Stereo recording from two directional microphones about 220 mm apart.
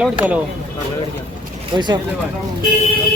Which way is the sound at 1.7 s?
20° right (ahead or behind).